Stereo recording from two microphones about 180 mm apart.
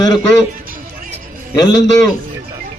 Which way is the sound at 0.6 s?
50° right (ahead or behind).